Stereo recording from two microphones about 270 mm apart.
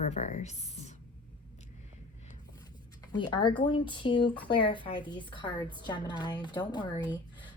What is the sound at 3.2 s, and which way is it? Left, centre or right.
Speech, centre.